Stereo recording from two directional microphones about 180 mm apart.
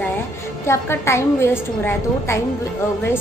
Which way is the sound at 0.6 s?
15° left (ahead or behind).